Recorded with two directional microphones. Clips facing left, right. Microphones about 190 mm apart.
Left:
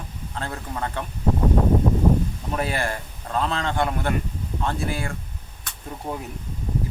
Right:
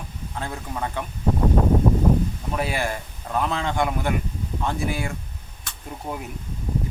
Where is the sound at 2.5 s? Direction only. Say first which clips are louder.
Left 1 dB; 10° right (ahead or behind).